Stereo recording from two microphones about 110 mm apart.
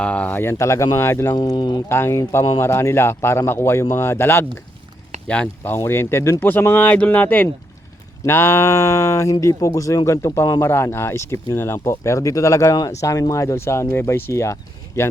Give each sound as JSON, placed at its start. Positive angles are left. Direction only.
{"t": 0.0, "sound": "speech", "side_deg": 10}
{"t": 1.4, "sound": "speech", "side_deg": 40}
{"t": 1.9, "sound": "speech", "side_deg": 25}